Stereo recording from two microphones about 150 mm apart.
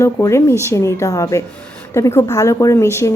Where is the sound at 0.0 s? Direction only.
20° left (ahead or behind).